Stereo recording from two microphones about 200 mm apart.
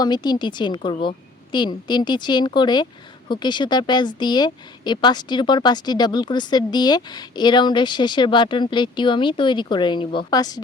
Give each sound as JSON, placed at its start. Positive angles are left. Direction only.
{"t": 0.0, "sound": "speech", "side_deg": 20}